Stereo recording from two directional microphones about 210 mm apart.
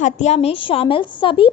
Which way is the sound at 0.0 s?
30° left (ahead or behind).